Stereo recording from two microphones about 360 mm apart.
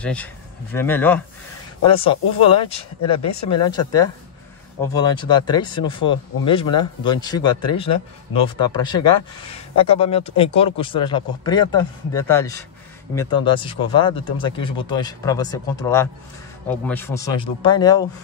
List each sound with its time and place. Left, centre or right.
0.0 s speech: centre
3.2 s speech: left
3.5 s speech: centre